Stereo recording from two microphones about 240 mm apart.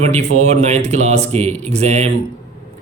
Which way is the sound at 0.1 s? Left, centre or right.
Right.